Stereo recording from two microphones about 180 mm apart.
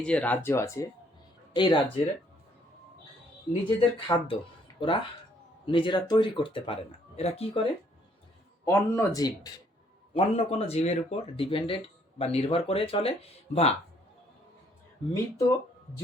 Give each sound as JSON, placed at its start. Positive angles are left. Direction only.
{"t": 0.0, "sound": "speech", "side_deg": 5}
{"t": 1.5, "sound": "speech", "side_deg": 25}
{"t": 3.8, "sound": "speech", "side_deg": 30}
{"t": 8.6, "sound": "speech", "side_deg": 15}
{"t": 10.2, "sound": "speech", "side_deg": 35}
{"t": 15.1, "sound": "speech", "side_deg": 15}